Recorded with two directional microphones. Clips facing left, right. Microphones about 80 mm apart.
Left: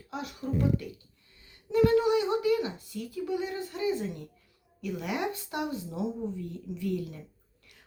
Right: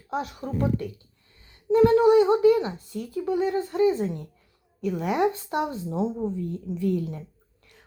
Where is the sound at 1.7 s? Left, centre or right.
Right.